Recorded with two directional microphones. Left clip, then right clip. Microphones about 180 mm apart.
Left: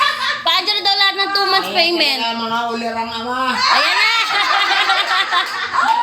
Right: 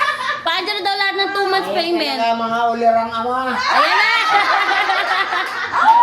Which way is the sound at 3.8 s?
Centre (ahead or behind).